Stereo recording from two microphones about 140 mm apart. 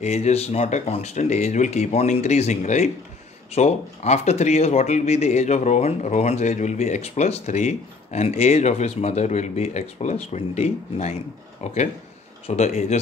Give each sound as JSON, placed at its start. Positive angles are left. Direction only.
{"t": 0.0, "sound": "speech", "side_deg": 50}